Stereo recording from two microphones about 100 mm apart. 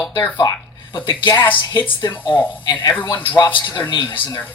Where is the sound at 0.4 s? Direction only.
40° left (ahead or behind).